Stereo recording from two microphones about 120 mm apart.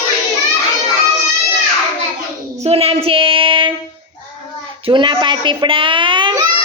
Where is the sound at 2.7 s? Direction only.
55° right (ahead or behind).